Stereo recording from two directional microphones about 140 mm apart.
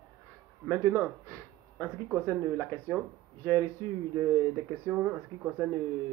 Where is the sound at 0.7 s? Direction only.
15° left (ahead or behind).